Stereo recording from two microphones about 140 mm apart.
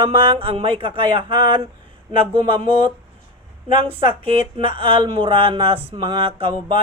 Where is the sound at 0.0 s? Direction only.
40° right (ahead or behind).